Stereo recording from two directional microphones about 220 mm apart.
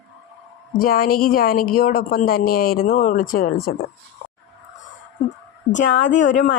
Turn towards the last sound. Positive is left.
turn(degrees=35)  # may be behind; listen again after turning